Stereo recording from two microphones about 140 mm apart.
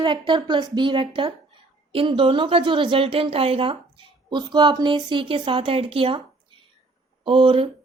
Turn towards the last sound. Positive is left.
turn(degrees=-40)  # may be behind; listen again after turning